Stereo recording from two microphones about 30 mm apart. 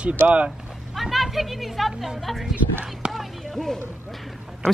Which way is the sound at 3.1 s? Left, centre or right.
Centre.